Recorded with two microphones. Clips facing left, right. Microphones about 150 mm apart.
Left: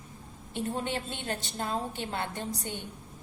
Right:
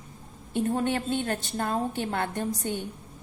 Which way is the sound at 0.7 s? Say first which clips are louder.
Right 8 dB; 50° right (ahead or behind).